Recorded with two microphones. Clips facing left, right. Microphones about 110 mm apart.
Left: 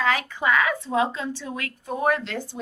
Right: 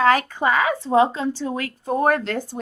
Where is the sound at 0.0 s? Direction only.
45° right (ahead or behind).